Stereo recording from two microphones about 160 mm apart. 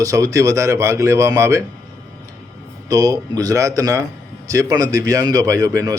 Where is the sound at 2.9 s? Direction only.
20° right (ahead or behind).